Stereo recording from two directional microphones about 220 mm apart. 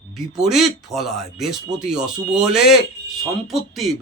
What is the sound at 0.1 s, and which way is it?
Speech, centre (ahead or behind).